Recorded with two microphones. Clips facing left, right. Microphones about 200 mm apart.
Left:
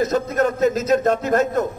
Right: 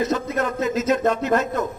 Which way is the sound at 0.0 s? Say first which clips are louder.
Left 4 dB; 45° left (ahead or behind).